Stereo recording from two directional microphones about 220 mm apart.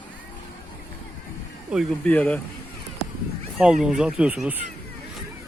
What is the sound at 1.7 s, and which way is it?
Speech, 5° left (ahead or behind).